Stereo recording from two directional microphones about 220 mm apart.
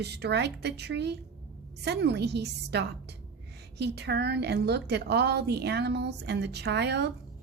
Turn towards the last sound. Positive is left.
turn(degrees=-50)  # may be behind; listen again after turning